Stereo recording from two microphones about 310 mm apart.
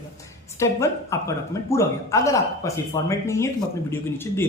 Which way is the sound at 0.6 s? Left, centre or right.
Centre.